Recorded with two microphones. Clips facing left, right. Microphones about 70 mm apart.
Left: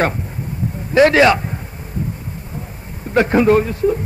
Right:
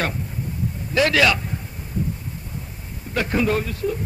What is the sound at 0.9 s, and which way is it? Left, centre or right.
Speech, left.